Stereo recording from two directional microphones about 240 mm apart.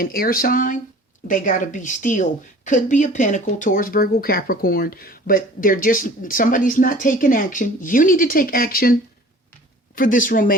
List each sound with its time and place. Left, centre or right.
0.0 s speech: left